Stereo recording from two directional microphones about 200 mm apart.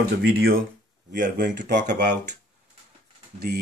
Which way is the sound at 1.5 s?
40° right (ahead or behind).